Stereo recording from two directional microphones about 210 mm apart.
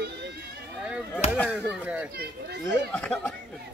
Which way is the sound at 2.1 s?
50° right (ahead or behind).